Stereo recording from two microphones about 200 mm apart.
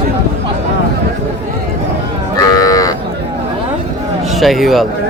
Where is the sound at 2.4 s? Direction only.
20° left (ahead or behind).